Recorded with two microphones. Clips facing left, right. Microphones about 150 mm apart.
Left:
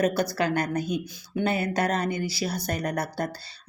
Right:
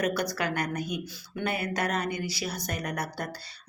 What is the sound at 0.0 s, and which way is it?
A woman's voice, 30° left (ahead or behind).